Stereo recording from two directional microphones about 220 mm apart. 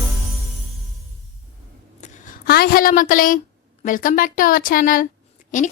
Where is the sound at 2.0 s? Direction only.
40° left (ahead or behind).